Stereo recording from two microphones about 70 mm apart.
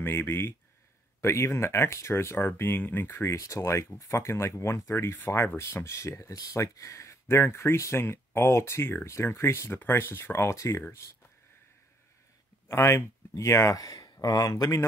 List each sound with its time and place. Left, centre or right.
0.0 s speech: left
3.3 s speech: left
12.6 s speech: left